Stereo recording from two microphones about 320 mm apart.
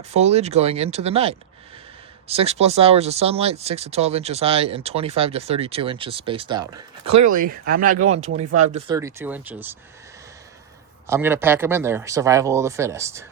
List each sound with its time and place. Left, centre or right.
0.1 s speech: centre
7.0 s speech: right
8.0 s speech: centre
11.0 s speech: centre